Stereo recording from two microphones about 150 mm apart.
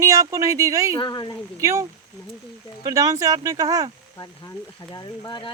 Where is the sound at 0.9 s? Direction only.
30° left (ahead or behind).